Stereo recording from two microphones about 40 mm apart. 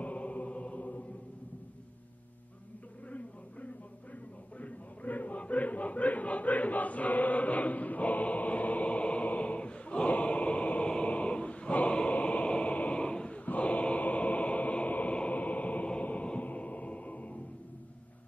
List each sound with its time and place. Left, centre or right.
0.0 s music: left
3.1 s a sound: left
15.3 s music: left